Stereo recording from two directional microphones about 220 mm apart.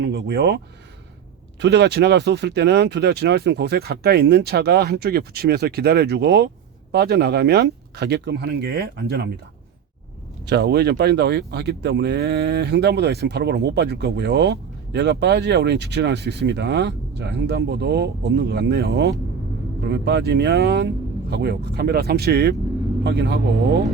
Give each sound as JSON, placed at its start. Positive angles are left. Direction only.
{"t": 0.0, "sound": "speech", "side_deg": -50}
{"t": 1.6, "sound": "speech", "side_deg": -50}
{"t": 10.4, "sound": "speech", "side_deg": -50}